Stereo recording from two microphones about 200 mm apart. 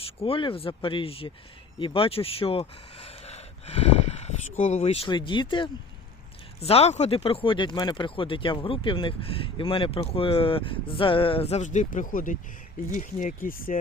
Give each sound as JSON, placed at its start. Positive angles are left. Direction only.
{"t": 0.0, "sound": "speech", "side_deg": 30}